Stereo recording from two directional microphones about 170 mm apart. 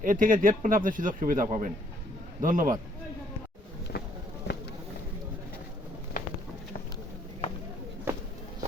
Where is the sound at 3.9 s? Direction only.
70° left (ahead or behind).